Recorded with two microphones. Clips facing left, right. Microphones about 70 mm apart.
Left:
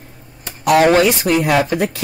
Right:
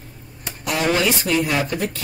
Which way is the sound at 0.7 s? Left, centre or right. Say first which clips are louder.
Left 10 dB; left.